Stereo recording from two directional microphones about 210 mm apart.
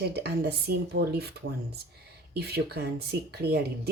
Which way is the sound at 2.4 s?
50° right (ahead or behind).